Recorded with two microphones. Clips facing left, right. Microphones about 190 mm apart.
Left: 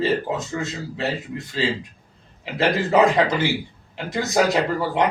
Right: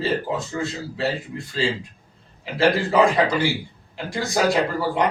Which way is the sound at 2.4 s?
20° left (ahead or behind).